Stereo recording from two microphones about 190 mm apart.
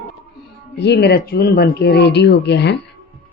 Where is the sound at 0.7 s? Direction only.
60° left (ahead or behind).